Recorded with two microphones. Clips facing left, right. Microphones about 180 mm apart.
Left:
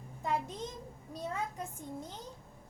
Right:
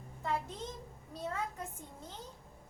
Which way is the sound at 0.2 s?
15° left (ahead or behind).